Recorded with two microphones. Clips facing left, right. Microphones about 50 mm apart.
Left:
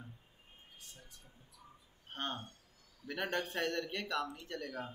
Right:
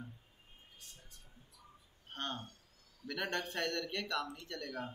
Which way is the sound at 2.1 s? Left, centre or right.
Centre.